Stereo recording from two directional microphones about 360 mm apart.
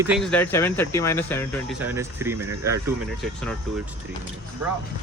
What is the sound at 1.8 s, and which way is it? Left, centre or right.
Speech, centre.